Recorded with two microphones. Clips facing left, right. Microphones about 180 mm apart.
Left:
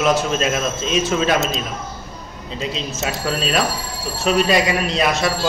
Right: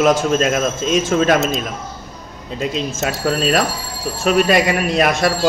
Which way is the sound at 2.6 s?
50° right (ahead or behind).